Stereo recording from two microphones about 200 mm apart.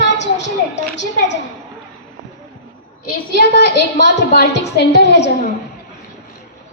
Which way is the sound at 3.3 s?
55° left (ahead or behind).